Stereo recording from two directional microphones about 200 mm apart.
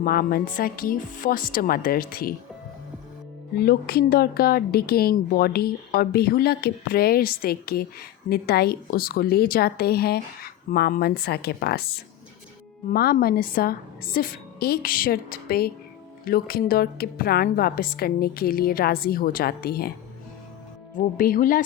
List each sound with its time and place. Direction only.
0.0 s a woman's voice: 50° left (ahead or behind)
3.5 s a woman's voice: 50° left (ahead or behind)
12.9 s a woman's voice: 50° left (ahead or behind)
20.9 s a woman's voice: 45° left (ahead or behind)